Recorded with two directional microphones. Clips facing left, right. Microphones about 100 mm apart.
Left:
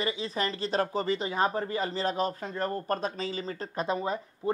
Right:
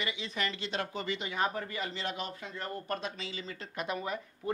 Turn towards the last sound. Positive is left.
turn(degrees=30)  # may be behind; listen again after turning